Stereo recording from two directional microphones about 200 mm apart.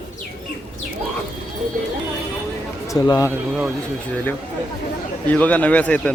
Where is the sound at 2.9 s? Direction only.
15° left (ahead or behind).